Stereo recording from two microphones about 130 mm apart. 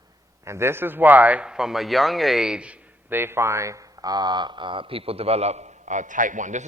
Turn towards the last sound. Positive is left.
turn(degrees=-75)  # may be behind; listen again after turning